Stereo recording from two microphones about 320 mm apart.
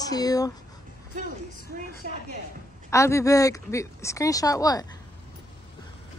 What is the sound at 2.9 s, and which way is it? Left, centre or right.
Speech, centre.